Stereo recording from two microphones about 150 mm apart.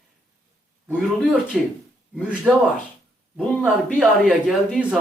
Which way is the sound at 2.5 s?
10° right (ahead or behind).